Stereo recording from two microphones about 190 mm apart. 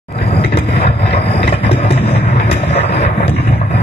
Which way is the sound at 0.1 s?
30° left (ahead or behind).